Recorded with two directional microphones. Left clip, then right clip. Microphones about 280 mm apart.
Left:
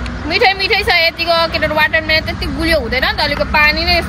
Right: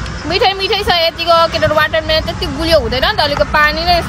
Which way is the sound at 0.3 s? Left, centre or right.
Centre.